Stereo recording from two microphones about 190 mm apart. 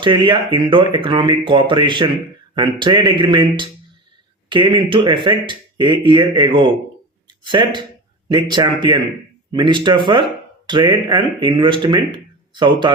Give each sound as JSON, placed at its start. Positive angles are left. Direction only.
{"t": 0.0, "sound": "speech", "side_deg": -25}